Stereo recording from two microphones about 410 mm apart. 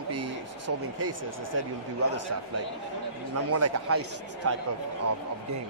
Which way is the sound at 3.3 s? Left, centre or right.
Right.